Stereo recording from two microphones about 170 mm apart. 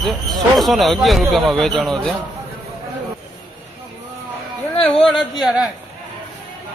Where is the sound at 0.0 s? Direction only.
Centre (ahead or behind).